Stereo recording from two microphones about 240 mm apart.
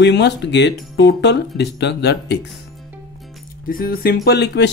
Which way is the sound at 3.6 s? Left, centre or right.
Left.